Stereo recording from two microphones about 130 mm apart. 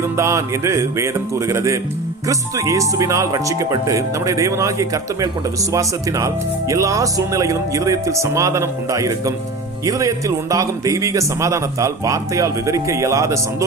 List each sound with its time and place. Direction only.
0.2 s speech: 20° right (ahead or behind)